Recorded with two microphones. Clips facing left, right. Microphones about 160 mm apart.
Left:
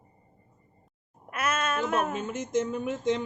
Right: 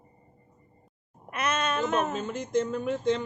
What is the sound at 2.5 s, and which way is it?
Speech, 15° left (ahead or behind).